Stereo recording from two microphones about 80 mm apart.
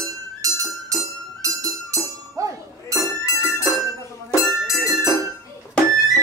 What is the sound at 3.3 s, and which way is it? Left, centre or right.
Music, left.